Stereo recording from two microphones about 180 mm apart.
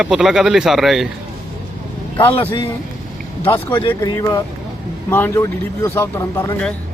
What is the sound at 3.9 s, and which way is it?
Speech, 20° left (ahead or behind).